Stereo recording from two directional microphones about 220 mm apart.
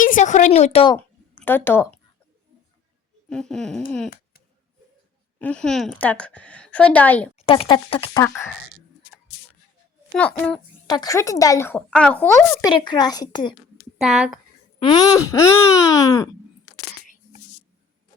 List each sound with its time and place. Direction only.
0.0 s a woman's voice: 35° left (ahead or behind)
0.9 s a sound: 10° left (ahead or behind)
3.2 s speech: 5° left (ahead or behind)
5.4 s speech: 5° left (ahead or behind)
7.3 s speech: 25° left (ahead or behind)
10.2 s speech: 5° left (ahead or behind)
10.8 s speech: 15° left (ahead or behind)
14.0 s speech: 5° right (ahead or behind)
14.8 s speech: 15° left (ahead or behind)